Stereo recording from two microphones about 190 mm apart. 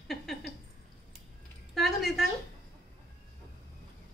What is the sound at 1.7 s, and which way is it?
Speech, centre (ahead or behind).